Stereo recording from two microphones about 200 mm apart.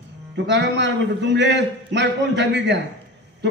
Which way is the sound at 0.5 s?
60° right (ahead or behind).